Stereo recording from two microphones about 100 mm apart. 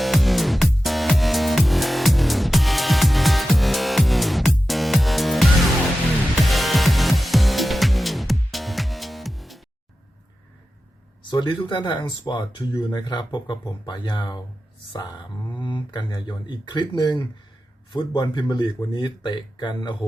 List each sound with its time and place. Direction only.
0.0 s music: centre (ahead or behind)
11.2 s speech: 50° left (ahead or behind)